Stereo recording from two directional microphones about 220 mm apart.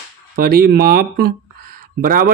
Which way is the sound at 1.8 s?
40° right (ahead or behind).